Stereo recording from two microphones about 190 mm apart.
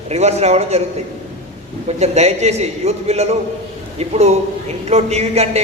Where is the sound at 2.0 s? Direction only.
35° right (ahead or behind).